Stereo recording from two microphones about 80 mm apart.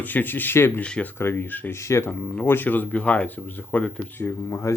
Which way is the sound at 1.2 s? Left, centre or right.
Left.